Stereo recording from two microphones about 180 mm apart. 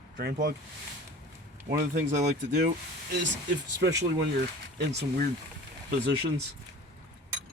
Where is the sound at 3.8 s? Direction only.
75° right (ahead or behind).